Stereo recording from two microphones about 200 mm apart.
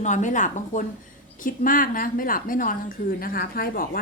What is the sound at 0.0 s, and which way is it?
A woman's voice, 40° left (ahead or behind).